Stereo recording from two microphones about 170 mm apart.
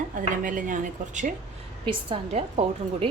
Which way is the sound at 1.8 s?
35° right (ahead or behind).